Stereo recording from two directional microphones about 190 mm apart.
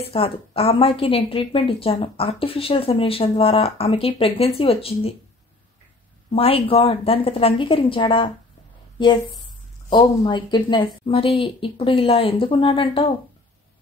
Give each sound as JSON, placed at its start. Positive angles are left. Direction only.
{"t": 0.1, "sound": "a woman's voice", "side_deg": 30}
{"t": 6.3, "sound": "a woman's voice", "side_deg": 30}
{"t": 9.8, "sound": "a woman's voice", "side_deg": 25}